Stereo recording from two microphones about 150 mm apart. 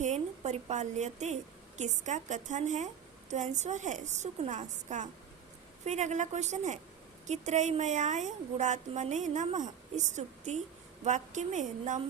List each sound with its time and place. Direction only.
0.0 s a woman's voice: 50° right (ahead or behind)